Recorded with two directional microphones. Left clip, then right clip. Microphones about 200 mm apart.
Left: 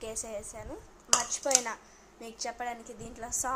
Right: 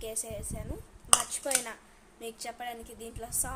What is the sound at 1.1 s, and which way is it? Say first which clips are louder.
Dishes: even; 25° right (ahead or behind).